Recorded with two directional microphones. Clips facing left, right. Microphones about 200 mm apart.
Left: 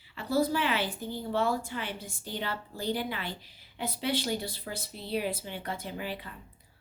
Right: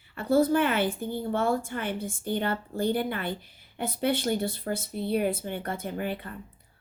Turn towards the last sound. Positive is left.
turn(degrees=-55)  # may be behind; listen again after turning